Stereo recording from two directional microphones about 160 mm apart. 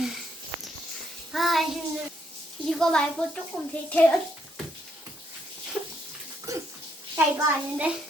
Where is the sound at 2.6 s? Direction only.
5° left (ahead or behind).